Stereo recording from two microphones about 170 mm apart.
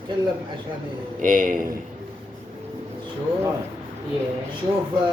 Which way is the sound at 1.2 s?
50° right (ahead or behind).